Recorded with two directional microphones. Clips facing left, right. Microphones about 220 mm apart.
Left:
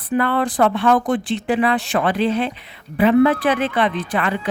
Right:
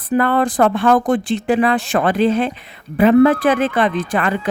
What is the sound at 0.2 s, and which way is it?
Speech, 45° right (ahead or behind).